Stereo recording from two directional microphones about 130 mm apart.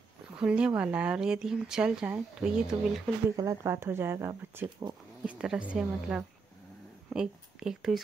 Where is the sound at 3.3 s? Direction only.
25° right (ahead or behind).